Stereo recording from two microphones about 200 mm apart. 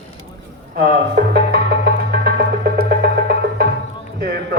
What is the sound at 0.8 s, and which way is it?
Music, 55° right (ahead or behind).